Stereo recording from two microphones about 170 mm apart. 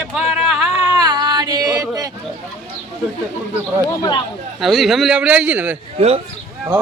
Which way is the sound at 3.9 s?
25° left (ahead or behind).